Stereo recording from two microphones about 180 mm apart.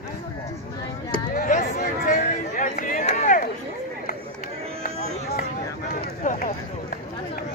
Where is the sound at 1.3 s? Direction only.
50° left (ahead or behind).